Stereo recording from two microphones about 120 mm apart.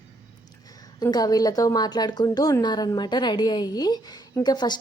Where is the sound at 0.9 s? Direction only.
35° left (ahead or behind).